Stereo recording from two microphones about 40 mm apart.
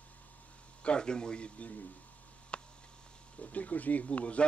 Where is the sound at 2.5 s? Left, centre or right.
Left.